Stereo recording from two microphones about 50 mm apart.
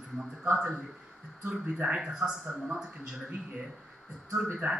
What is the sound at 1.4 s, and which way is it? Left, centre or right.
Speech, right.